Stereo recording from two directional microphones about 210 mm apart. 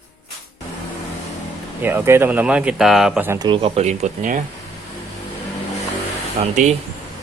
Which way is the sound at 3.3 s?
20° right (ahead or behind).